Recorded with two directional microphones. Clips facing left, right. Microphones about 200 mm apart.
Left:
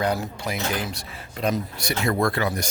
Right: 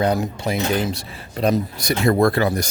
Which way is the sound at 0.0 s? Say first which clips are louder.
Right 5 dB; 20° right (ahead or behind).